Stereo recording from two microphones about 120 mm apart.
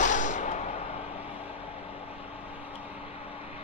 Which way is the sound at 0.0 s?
90° left.